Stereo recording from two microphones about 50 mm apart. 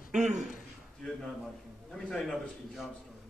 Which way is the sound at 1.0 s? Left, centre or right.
Centre.